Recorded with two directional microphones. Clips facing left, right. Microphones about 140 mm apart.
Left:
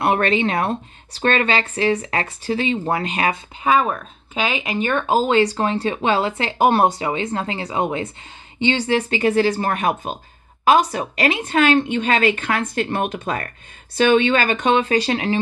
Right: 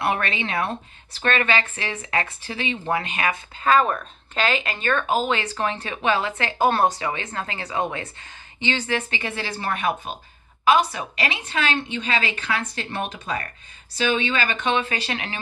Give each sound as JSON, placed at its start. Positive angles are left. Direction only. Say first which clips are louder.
{"t": 0.0, "sound": "speech", "louder": "left 7 dB", "side_deg": 40}
{"t": 3.6, "sound": "speech", "louder": "left 1 dB", "side_deg": 5}
{"t": 5.0, "sound": "a woman's voice", "louder": "left 7 dB", "side_deg": 35}